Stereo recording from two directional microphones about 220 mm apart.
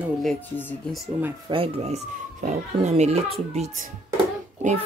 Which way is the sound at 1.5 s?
25° right (ahead or behind).